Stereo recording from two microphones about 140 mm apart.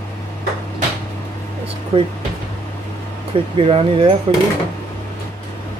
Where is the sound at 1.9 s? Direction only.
40° right (ahead or behind).